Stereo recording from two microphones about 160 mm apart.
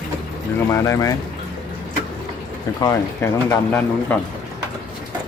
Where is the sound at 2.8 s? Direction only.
10° left (ahead or behind).